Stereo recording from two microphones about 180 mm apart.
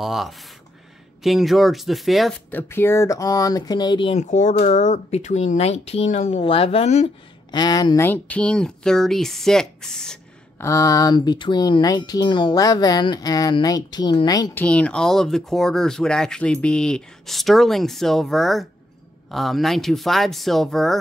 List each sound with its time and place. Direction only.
0.0 s speech: centre (ahead or behind)
2.5 s speech: 10° left (ahead or behind)
4.1 s speech: 40° left (ahead or behind)
7.5 s speech: 25° left (ahead or behind); by 10.1 s 5° left (ahead or behind)
10.6 s speech: 15° left (ahead or behind)
14.6 s speech: 5° left (ahead or behind)